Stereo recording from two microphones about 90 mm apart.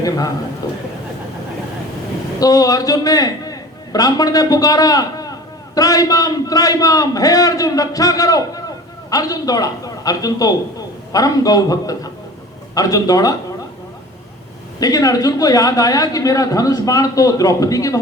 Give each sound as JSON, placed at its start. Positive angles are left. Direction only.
{"t": 2.4, "sound": "a man's voice", "side_deg": 45}
{"t": 14.8, "sound": "a man's voice", "side_deg": 45}